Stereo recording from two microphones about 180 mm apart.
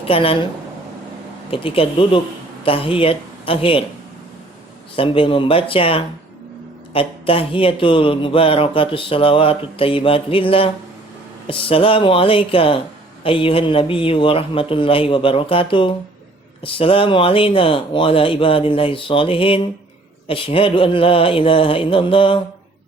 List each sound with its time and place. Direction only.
0.0 s a woman's voice: 30° left (ahead or behind)
1.5 s speech: 30° left (ahead or behind)
4.9 s speech: 30° left (ahead or behind)